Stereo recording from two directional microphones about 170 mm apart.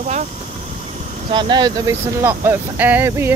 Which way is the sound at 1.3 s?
25° right (ahead or behind).